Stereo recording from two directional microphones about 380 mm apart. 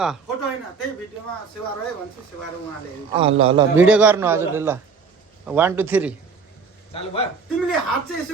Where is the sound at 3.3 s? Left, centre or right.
Right.